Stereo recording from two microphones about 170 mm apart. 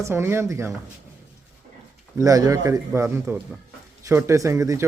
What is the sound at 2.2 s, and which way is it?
Speech, 20° right (ahead or behind).